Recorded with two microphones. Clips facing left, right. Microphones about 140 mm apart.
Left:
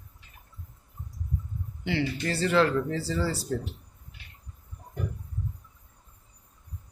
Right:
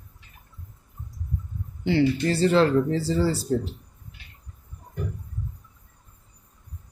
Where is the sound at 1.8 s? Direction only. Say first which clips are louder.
Right 8 dB; 35° right (ahead or behind).